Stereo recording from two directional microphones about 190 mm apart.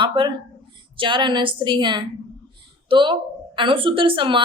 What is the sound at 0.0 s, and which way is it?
A woman's voice, 25° right (ahead or behind).